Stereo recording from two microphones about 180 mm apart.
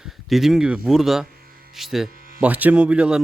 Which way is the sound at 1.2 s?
55° right (ahead or behind).